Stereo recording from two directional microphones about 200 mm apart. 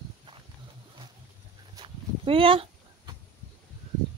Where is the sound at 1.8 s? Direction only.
25° right (ahead or behind).